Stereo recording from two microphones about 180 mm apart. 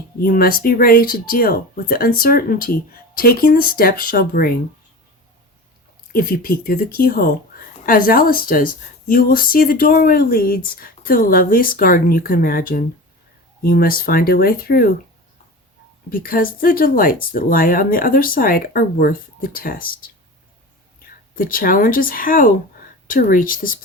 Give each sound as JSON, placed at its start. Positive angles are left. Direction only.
{"t": 0.2, "sound": "speech", "side_deg": 55}
{"t": 6.1, "sound": "speech", "side_deg": 55}
{"t": 16.0, "sound": "speech", "side_deg": 55}
{"t": 21.3, "sound": "speech", "side_deg": 50}